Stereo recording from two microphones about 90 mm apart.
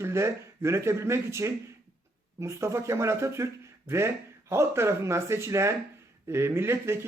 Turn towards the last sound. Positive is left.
turn(degrees=-30)  # may be behind; listen again after turning